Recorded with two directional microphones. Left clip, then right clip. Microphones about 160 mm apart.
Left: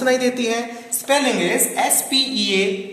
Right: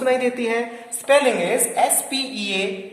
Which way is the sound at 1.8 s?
60° right (ahead or behind).